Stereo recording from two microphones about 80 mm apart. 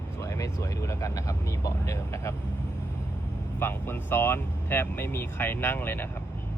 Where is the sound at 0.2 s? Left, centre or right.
Left.